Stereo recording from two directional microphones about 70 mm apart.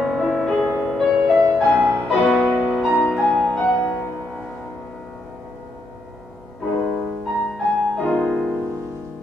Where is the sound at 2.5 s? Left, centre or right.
Left.